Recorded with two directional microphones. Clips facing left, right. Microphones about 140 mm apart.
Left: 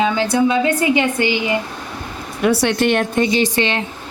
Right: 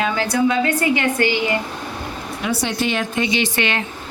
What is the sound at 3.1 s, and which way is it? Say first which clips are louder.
Speech: left 4 dB; 40° left (ahead or behind).